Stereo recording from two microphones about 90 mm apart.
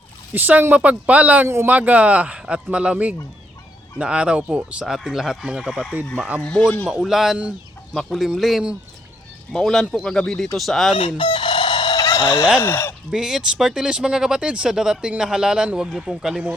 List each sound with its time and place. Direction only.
0.3 s speech: 20° right (ahead or behind)
1.5 s a man's voice: 30° right (ahead or behind)
1.7 s speech: 15° right (ahead or behind)
6.1 s speech: 15° right (ahead or behind)
6.4 s speech: 10° left (ahead or behind)
6.8 s speech: 5° right (ahead or behind)
11.2 s chicken: 65° left (ahead or behind)
12.2 s speech: 30° left (ahead or behind)
13.1 s speech: 5° right (ahead or behind)